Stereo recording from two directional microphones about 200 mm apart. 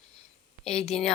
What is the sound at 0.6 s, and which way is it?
Speech, 30° left (ahead or behind).